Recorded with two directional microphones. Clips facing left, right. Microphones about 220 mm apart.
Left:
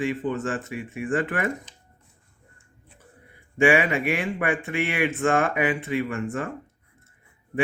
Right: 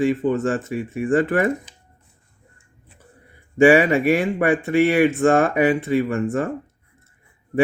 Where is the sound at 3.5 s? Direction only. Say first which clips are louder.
Right 7 dB; 35° right (ahead or behind).